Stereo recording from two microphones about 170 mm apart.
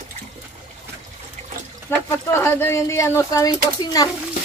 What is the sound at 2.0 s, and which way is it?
Speech, 15° left (ahead or behind).